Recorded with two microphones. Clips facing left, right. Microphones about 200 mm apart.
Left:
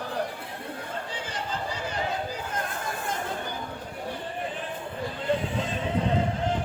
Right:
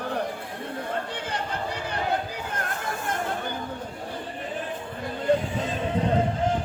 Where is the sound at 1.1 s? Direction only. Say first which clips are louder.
Right 2 dB; 60° right (ahead or behind).